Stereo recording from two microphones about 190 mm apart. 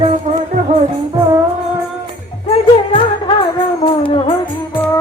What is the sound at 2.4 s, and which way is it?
Music, 30° left (ahead or behind).